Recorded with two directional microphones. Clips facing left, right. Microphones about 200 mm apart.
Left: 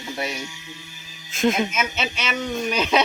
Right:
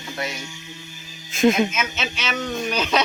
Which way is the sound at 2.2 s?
10° left (ahead or behind).